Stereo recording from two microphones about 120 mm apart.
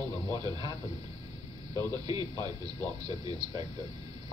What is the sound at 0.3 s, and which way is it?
Speech, 35° right (ahead or behind).